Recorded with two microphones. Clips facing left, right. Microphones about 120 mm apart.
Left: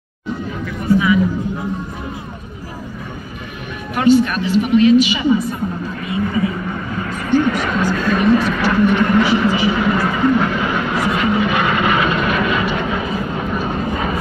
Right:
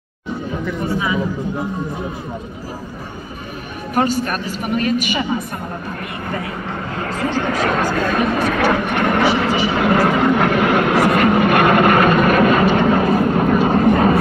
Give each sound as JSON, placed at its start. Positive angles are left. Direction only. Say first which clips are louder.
{"t": 0.8, "sound": "speech", "louder": "left 8 dB", "side_deg": -30}
{"t": 3.9, "sound": "a woman's voice", "louder": "left 5 dB", "side_deg": -40}
{"t": 6.0, "sound": "speech", "louder": "left 9 dB", "side_deg": -65}
{"t": 7.4, "sound": "vehicle", "louder": "even", "side_deg": -50}